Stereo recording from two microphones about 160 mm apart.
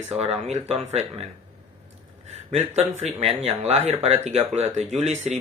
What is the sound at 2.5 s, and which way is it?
Speech, 45° right (ahead or behind).